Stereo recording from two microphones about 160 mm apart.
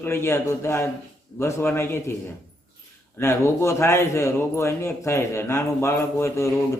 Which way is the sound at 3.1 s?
15° left (ahead or behind).